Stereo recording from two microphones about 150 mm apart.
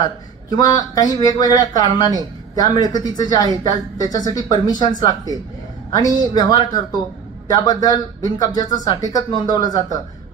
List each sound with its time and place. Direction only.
0.0 s speech: 25° left (ahead or behind)